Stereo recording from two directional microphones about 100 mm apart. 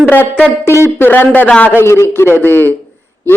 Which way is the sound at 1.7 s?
25° left (ahead or behind).